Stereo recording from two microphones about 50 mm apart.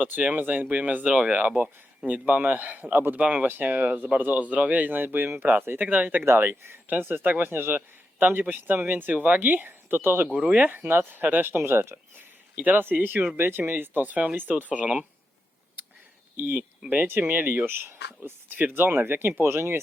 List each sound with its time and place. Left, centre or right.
0.0 s speech: right
3.2 s speech: right
10.3 s speech: right
10.7 s speech: right
11.5 s speech: right
12.5 s speech: right
16.4 s speech: right
19.4 s speech: right